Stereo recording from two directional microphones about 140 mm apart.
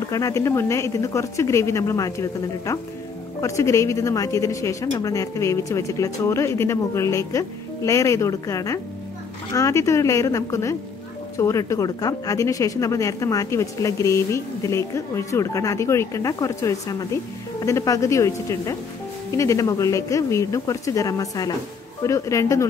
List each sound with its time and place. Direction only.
0.1 s speech: 20° left (ahead or behind)